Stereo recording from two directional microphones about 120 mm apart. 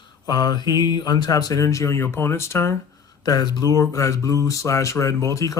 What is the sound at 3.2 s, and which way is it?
Speech, 35° left (ahead or behind).